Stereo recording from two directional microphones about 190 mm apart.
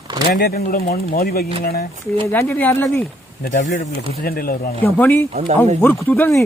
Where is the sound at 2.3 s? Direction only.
10° left (ahead or behind).